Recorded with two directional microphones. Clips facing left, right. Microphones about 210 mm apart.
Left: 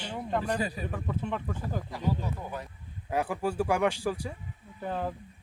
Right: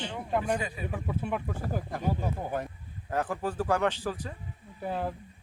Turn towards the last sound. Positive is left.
turn(degrees=-5)  # may be behind; listen again after turning